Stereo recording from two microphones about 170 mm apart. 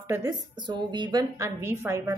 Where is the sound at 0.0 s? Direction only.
20° right (ahead or behind).